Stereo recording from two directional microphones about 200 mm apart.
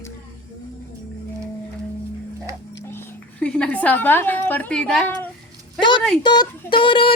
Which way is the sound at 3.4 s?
5° left (ahead or behind).